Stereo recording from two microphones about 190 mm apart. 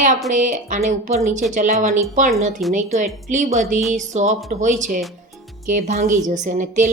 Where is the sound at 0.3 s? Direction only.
40° right (ahead or behind).